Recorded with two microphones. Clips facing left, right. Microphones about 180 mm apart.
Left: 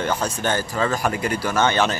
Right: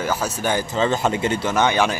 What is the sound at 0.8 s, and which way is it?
Speech, 25° right (ahead or behind).